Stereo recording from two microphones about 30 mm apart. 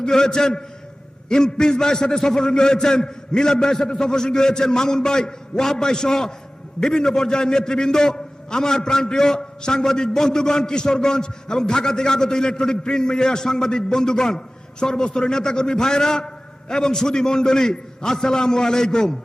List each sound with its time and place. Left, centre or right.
0.1 s a man's voice: left